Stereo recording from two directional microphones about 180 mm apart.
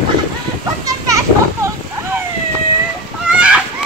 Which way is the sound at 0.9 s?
20° right (ahead or behind).